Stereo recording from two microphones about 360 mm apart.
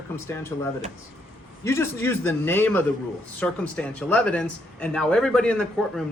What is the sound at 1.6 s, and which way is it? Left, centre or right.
Speech, centre.